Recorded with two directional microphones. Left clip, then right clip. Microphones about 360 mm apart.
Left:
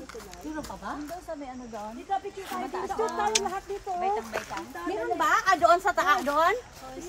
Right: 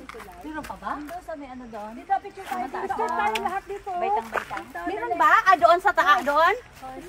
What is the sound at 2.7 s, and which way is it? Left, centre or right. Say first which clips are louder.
Speech: right 3 dB; right.